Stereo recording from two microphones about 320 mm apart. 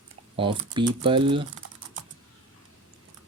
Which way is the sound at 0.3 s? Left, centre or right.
Centre.